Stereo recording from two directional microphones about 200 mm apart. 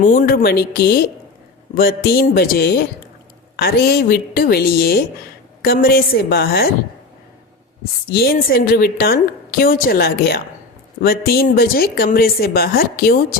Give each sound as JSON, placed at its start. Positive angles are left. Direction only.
{"t": 0.0, "sound": "a woman's voice", "side_deg": 40}
{"t": 8.1, "sound": "a woman's voice", "side_deg": 50}